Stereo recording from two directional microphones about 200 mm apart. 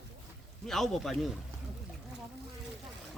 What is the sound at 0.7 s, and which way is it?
Speech, centre (ahead or behind).